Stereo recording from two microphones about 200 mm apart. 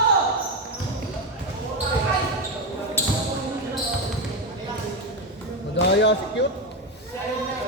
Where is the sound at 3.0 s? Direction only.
10° left (ahead or behind).